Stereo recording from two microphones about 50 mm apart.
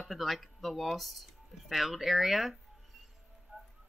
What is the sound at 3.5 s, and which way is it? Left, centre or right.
Music, right.